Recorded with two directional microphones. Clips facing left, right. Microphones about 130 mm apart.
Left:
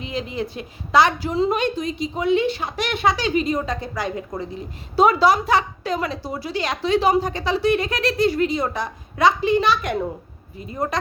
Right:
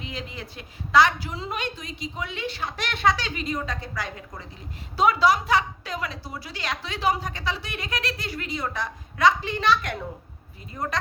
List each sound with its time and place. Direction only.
0.0 s a woman's voice: 20° left (ahead or behind)
4.9 s a woman's voice: 30° left (ahead or behind); by 10.0 s 10° left (ahead or behind)